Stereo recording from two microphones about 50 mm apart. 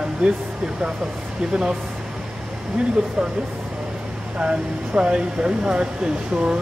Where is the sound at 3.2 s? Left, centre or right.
Centre.